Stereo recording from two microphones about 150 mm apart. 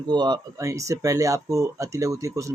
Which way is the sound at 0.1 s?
25° right (ahead or behind).